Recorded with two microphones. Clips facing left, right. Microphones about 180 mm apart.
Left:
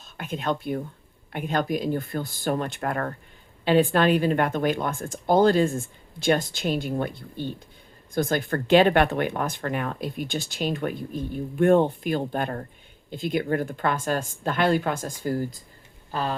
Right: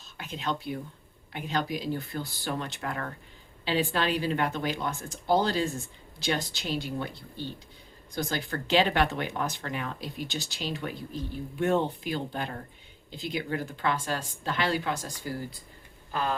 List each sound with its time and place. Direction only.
0.2 s speech: 55° left (ahead or behind)